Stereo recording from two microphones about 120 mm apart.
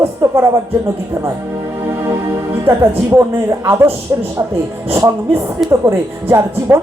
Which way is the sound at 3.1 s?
20° right (ahead or behind).